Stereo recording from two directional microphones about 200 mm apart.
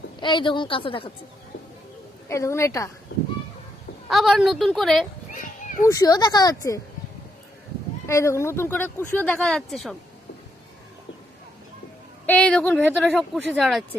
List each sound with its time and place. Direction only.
0.2 s a woman's voice: 25° left (ahead or behind)
2.3 s speech: 15° left (ahead or behind)
4.1 s speech: centre (ahead or behind)
5.3 s children playing: 40° left (ahead or behind)
5.8 s speech: 15° left (ahead or behind)
8.0 s speech: 15° left (ahead or behind)
12.2 s speech: 5° left (ahead or behind)